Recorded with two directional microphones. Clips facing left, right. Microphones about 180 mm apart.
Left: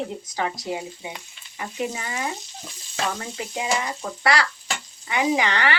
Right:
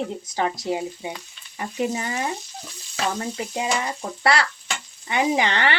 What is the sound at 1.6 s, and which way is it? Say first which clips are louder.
Speech: right 3 dB; 35° right (ahead or behind).